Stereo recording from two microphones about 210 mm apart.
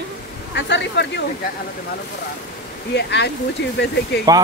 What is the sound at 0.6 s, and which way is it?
Speech, 55° left (ahead or behind).